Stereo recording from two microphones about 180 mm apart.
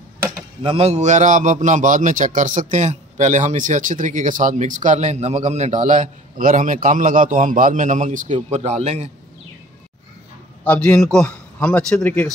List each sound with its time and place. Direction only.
0.6 s a man's voice: 30° right (ahead or behind)
10.6 s a man's voice: 5° left (ahead or behind)